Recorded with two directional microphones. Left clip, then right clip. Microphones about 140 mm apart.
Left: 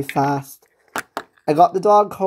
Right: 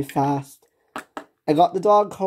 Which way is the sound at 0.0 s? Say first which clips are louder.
Left 3 dB; 25° left (ahead or behind).